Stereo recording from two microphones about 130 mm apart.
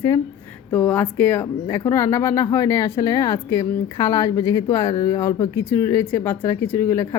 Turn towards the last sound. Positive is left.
turn(degrees=20)  # may be behind; listen again after turning